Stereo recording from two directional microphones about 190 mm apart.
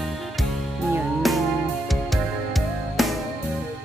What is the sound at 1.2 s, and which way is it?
Music, centre (ahead or behind).